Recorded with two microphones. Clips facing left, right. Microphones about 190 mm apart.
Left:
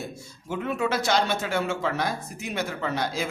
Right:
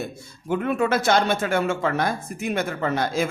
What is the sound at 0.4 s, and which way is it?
Speech, 55° right (ahead or behind).